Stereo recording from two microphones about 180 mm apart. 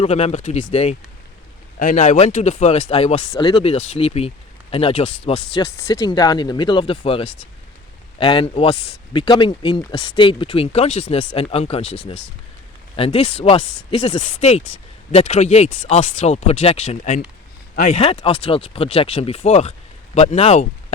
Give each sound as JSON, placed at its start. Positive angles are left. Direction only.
{"t": 0.0, "sound": "speech", "side_deg": 35}
{"t": 3.3, "sound": "speech", "side_deg": 25}
{"t": 3.6, "sound": "speech", "side_deg": 35}
{"t": 14.2, "sound": "speech", "side_deg": 40}